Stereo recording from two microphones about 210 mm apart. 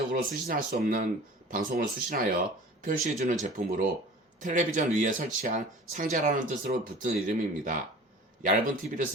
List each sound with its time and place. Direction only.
0.1 s speech: 40° right (ahead or behind)